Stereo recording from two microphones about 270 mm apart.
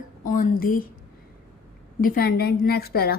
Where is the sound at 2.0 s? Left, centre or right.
Left.